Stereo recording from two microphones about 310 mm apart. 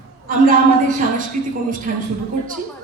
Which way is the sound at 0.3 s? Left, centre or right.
Right.